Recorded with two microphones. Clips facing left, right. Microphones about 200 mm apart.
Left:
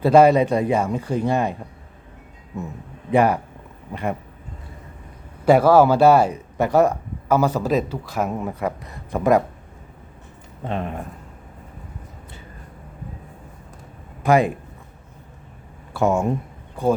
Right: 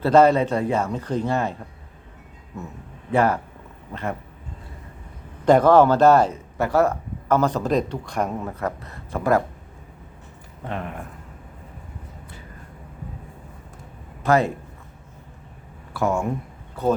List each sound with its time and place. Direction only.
0.0 s speech: 10° left (ahead or behind)
3.1 s speech: 15° left (ahead or behind)
5.5 s speech: 10° left (ahead or behind)
10.6 s speech: 25° left (ahead or behind)
14.3 s speech: 15° left (ahead or behind)
15.9 s speech: 25° left (ahead or behind)
16.8 s speech: 15° left (ahead or behind)